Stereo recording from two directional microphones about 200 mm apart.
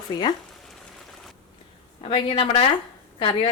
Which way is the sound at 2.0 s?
25° left (ahead or behind).